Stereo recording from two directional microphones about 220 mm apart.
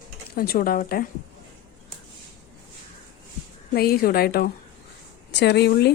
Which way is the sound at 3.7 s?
45° left (ahead or behind).